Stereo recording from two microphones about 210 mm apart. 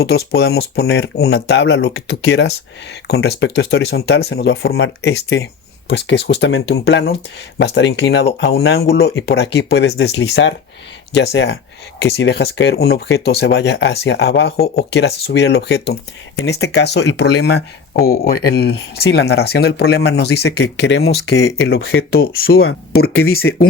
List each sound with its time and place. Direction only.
0.0 s speech: 50° left (ahead or behind)